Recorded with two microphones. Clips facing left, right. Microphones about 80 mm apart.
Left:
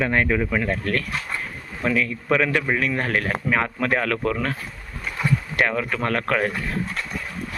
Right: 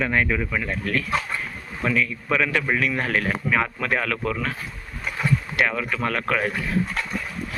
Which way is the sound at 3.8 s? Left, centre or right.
Left.